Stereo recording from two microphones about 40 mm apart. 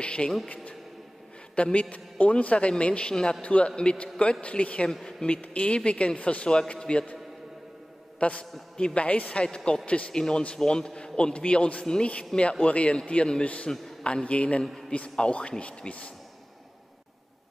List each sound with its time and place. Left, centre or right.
0.0 s speech: left
1.5 s a man's voice: left
3.1 s a man's voice: left
8.2 s a man's voice: left
10.1 s a man's voice: centre